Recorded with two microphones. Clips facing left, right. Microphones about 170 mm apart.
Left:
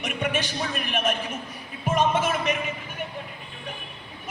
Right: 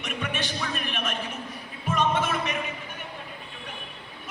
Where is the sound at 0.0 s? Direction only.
45° left (ahead or behind).